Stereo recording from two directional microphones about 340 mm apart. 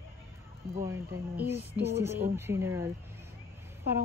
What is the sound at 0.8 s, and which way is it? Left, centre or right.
Speech, centre.